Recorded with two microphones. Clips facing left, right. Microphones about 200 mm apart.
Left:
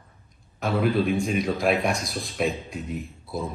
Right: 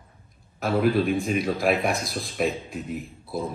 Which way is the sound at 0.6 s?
Centre (ahead or behind).